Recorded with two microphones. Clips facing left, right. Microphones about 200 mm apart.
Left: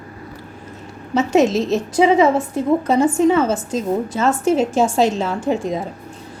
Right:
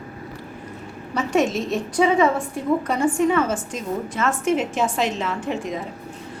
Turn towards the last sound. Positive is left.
turn(degrees=40)  # may be behind; listen again after turning